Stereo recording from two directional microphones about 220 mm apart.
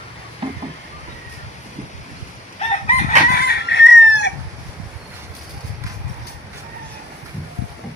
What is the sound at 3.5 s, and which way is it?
Chicken, 50° left (ahead or behind).